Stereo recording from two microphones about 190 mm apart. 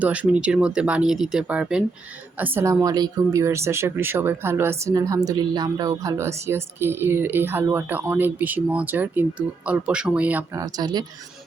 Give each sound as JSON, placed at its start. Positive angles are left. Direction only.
{"t": 0.0, "sound": "speech", "side_deg": -5}